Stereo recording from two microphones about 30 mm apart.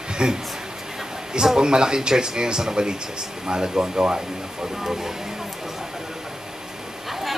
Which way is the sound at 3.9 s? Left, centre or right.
Right.